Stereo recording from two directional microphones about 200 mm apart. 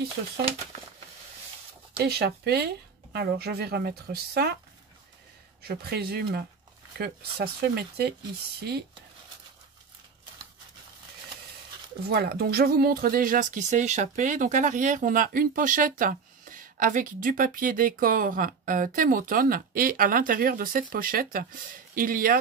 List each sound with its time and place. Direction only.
2.0 s speech: 55° right (ahead or behind)
5.6 s speech: 50° right (ahead or behind)
12.1 s speech: 50° right (ahead or behind)